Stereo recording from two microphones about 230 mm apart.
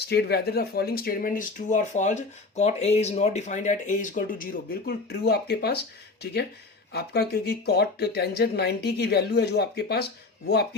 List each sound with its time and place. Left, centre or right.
0.1 s speech: left
6.9 s speech: left